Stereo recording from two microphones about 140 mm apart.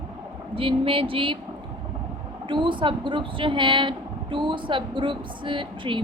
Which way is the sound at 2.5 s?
35° right (ahead or behind).